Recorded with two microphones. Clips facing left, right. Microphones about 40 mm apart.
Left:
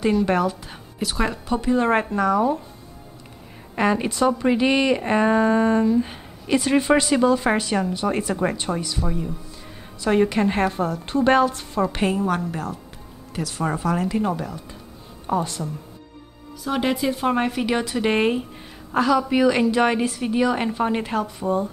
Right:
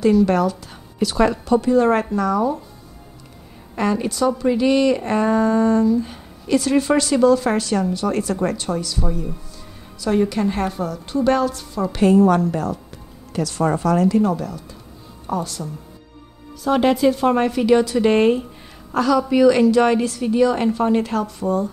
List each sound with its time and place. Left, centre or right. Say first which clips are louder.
0.0 s a woman's voice: right 4 dB; centre
0.9 s a woman's voice: right 7 dB; centre
3.7 s a woman's voice: even; left
12.1 s a woman's voice: right 8 dB; centre; by 15.6 s left
16.6 s a woman's voice: right 6 dB; centre